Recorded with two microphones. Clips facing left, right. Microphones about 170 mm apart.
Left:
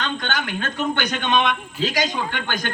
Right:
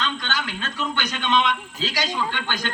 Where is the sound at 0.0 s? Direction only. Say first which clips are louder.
Left 2 dB; 55° left (ahead or behind).